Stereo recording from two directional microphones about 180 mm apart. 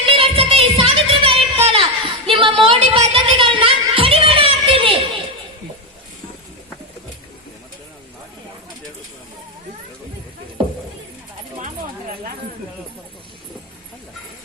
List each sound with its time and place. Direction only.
0.0 s music: 30° right (ahead or behind)